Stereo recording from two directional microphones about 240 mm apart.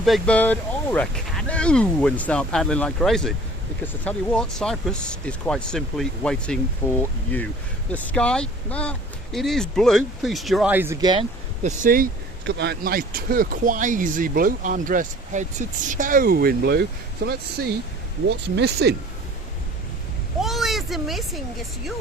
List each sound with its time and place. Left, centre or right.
0.0 s speech: centre
11.6 s speech: right
20.4 s a sound: centre